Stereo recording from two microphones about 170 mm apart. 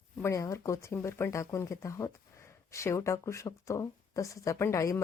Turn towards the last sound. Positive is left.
turn(degrees=20)  # may be behind; listen again after turning